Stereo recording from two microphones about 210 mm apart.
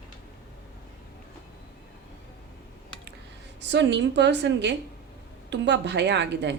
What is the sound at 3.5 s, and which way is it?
A woman's voice, 55° right (ahead or behind).